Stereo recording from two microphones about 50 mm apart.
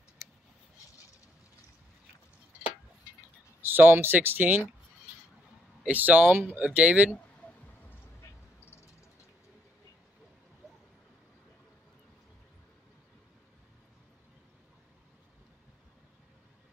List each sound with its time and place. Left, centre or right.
3.6 s speech: right
5.9 s speech: right
6.3 s speech: right
6.6 s speech: right
8.2 s a sound: left